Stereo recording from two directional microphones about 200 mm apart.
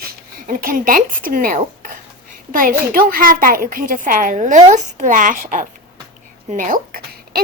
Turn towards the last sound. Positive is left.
turn(degrees=-50)  # may be behind; listen again after turning